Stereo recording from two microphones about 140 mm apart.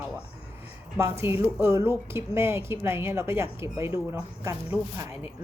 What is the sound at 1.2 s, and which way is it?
A woman's voice, 15° right (ahead or behind).